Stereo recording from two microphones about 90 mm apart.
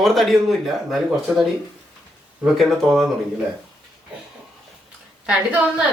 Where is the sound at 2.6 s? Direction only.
Centre (ahead or behind).